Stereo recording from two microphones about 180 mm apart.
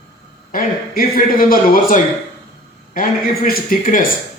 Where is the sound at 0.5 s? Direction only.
50° left (ahead or behind).